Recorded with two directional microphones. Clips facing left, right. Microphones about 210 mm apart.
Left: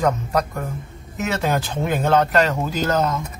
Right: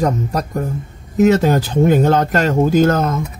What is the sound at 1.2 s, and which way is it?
Speech, 40° right (ahead or behind).